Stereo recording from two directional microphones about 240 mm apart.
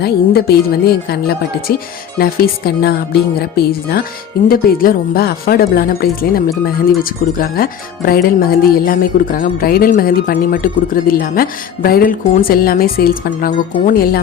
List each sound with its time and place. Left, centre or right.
0.0 s speech: left